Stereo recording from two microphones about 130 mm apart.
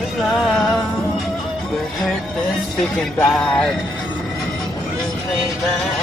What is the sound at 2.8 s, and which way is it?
Music, 5° left (ahead or behind).